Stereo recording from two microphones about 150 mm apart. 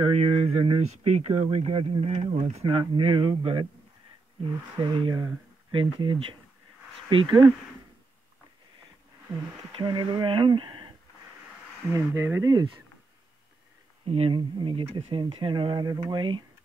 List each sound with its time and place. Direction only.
0.0 s speech: 45° right (ahead or behind)
9.7 s speech: 35° right (ahead or behind)
11.9 s speech: 20° right (ahead or behind)
14.0 s speech: 40° right (ahead or behind)